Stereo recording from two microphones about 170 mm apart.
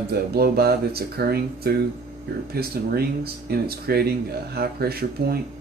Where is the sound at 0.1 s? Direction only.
65° right (ahead or behind).